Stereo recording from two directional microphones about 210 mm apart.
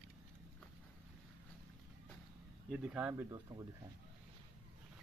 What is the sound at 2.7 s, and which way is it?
Speech, 5° right (ahead or behind).